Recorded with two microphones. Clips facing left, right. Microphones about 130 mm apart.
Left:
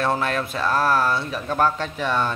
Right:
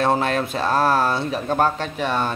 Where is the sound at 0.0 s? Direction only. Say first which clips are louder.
Right 3 dB; 25° right (ahead or behind).